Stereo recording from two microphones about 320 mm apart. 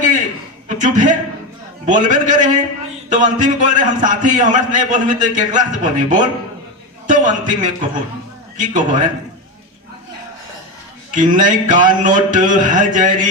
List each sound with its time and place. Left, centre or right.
0.7 s a man's voice: right
11.1 s a man's voice: right